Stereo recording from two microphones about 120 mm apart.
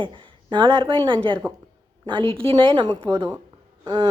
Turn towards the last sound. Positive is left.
turn(degrees=-40)  # may be behind; listen again after turning